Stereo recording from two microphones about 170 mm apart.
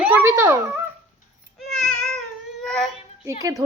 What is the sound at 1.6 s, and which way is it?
Baby cry, 5° left (ahead or behind).